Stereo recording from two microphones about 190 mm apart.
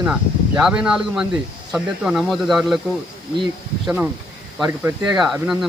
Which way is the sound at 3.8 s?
10° right (ahead or behind).